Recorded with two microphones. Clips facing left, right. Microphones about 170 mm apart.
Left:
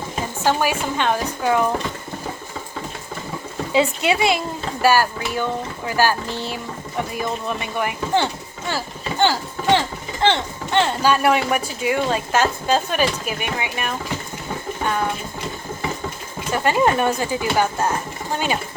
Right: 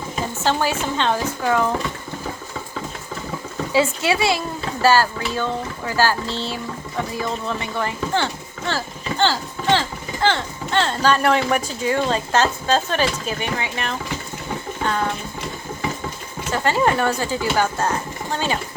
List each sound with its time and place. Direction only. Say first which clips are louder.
0.4 s speech: left 1 dB; 15° left (ahead or behind)
3.7 s speech: left 1 dB; 20° left (ahead or behind)
16.5 s speech: left 1 dB; 15° left (ahead or behind)